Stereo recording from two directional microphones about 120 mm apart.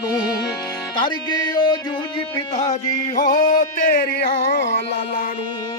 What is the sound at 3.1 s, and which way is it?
Music, 90° left.